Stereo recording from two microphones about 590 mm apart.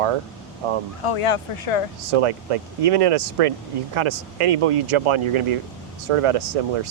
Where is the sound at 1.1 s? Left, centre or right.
Left.